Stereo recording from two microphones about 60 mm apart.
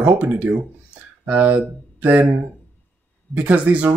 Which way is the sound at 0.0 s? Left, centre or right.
Right.